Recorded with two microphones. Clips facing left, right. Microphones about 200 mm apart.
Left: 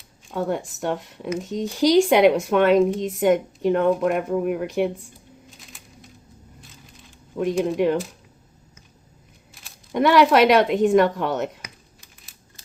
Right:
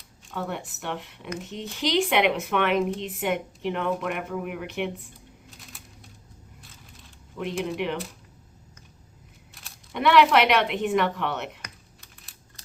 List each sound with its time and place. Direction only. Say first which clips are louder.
0.3 s speech: left 7 dB; 40° left (ahead or behind)
7.3 s speech: left 8 dB; 40° left (ahead or behind)
9.9 s speech: left 3 dB; 40° left (ahead or behind)
11.6 s typing: left 2 dB; centre (ahead or behind)